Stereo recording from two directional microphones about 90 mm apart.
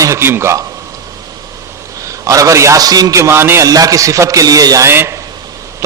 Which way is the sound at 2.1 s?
40° right (ahead or behind).